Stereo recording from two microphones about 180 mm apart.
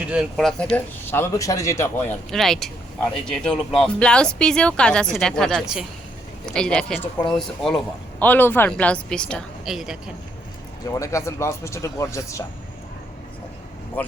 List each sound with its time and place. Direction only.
0.0 s speech: 5° right (ahead or behind)
1.1 s speech: 15° left (ahead or behind)
2.3 s speech: centre (ahead or behind)
10.8 s speech: 15° left (ahead or behind)